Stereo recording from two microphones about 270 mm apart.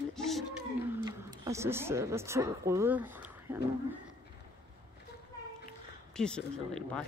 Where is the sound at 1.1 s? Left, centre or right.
Centre.